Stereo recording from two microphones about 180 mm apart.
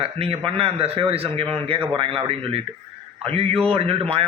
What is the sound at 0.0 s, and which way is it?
A man's voice, 30° right (ahead or behind).